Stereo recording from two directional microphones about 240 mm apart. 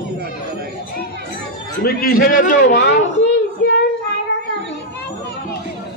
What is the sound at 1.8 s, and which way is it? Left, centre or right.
Speech, left.